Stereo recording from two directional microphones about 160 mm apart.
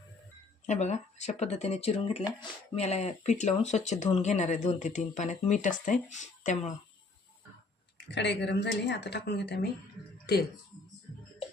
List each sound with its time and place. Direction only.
0.6 s speech: 45° left (ahead or behind)
7.9 s speech: 90° left